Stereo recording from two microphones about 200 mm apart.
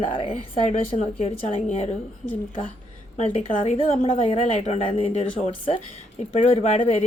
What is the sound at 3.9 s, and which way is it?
A woman's voice, 30° left (ahead or behind).